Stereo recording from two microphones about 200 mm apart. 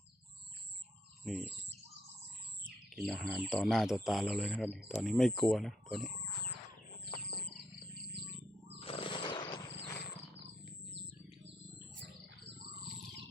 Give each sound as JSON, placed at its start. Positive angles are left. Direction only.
{"t": 1.2, "sound": "speech", "side_deg": 0}
{"t": 2.6, "sound": "speech", "side_deg": 0}
{"t": 8.8, "sound": "a sound", "side_deg": 30}
{"t": 11.9, "sound": "bird", "side_deg": -60}